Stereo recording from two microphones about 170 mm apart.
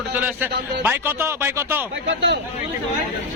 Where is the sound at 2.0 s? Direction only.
90° right.